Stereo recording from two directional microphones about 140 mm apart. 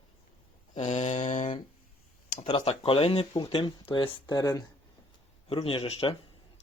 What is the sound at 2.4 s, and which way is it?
Speech, 45° left (ahead or behind).